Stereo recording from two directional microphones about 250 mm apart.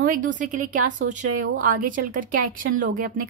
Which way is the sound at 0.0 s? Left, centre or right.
Right.